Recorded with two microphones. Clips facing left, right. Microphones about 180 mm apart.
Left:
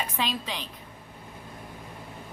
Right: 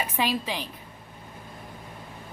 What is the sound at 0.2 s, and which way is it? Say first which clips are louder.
Speech: right 5 dB; 10° right (ahead or behind).